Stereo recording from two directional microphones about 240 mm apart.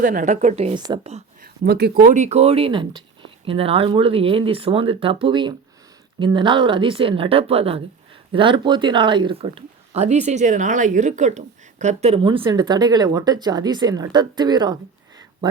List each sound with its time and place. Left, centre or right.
0.0 s speech: right
1.6 s speech: right; by 14.8 s centre